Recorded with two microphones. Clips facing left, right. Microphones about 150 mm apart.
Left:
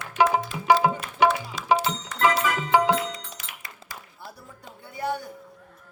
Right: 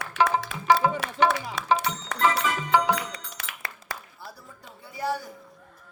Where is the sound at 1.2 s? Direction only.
70° right (ahead or behind).